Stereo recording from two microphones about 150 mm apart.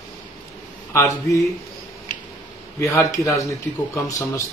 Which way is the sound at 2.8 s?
20° left (ahead or behind).